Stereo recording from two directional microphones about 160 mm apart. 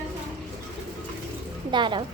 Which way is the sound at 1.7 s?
30° right (ahead or behind).